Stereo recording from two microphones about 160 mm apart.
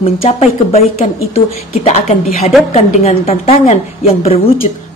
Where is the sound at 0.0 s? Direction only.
40° left (ahead or behind).